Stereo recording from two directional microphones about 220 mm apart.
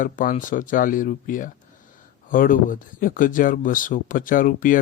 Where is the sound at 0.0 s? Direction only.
35° left (ahead or behind).